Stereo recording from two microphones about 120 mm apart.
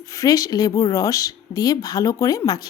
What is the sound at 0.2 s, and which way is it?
A woman's voice, 30° left (ahead or behind).